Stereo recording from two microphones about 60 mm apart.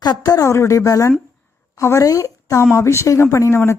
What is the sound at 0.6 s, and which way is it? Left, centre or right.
A woman's voice, left.